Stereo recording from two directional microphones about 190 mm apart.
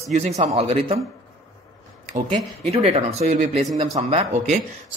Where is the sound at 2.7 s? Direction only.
30° right (ahead or behind).